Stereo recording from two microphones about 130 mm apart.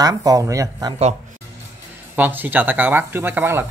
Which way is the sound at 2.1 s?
15° right (ahead or behind).